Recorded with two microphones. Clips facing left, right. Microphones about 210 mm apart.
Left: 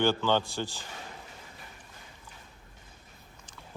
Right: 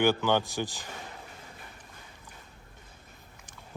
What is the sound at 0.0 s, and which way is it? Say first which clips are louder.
Speech: right 1 dB; 15° right (ahead or behind).